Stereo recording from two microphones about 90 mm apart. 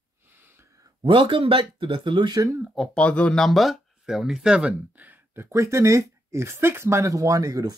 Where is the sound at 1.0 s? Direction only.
70° right (ahead or behind).